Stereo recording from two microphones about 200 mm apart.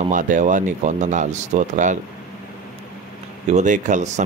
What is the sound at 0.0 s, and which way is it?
Speech, 40° right (ahead or behind).